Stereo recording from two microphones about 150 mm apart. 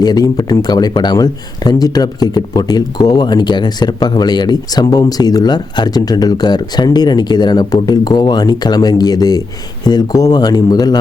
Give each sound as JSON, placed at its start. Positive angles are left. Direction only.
{"t": 0.0, "sound": "speech", "side_deg": 25}